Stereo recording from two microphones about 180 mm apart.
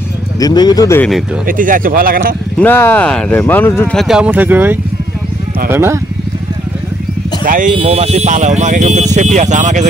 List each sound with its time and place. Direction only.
0.4 s speech: 20° left (ahead or behind)
1.5 s speech: 50° right (ahead or behind)
2.6 s speech: 10° left (ahead or behind); by 5.9 s 15° right (ahead or behind)
7.4 s speech: 45° right (ahead or behind)
7.7 s speech: 35° right (ahead or behind)